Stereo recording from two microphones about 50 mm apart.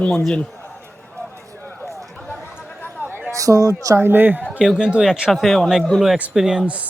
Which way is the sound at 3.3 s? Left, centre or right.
Right.